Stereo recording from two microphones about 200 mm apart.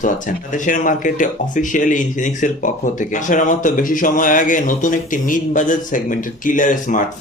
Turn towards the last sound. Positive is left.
turn(degrees=40)  # may be behind; listen again after turning